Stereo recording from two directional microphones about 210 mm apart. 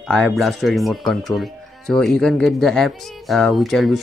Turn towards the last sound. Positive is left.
turn(degrees=0)  # may be behind; listen again after turning